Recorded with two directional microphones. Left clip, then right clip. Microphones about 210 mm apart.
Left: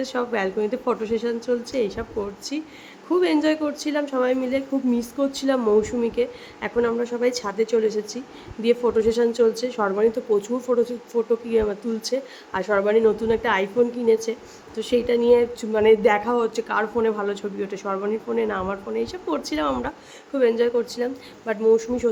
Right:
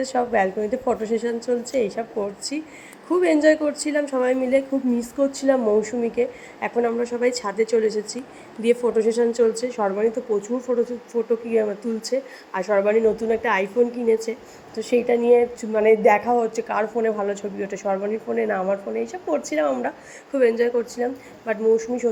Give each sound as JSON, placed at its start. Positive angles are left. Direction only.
{"t": 0.0, "sound": "a woman's voice", "side_deg": -5}